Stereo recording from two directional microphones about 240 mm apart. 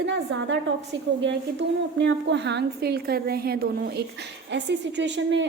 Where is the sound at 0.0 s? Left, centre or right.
Right.